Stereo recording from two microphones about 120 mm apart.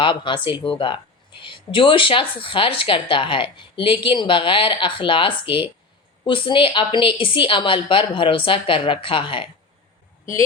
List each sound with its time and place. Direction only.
0.0 s speech: 45° left (ahead or behind)